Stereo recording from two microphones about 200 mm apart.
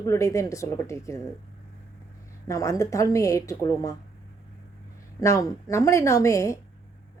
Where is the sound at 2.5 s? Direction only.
15° left (ahead or behind).